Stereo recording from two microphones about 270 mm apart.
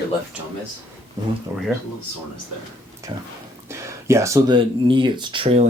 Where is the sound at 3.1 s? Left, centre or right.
Centre.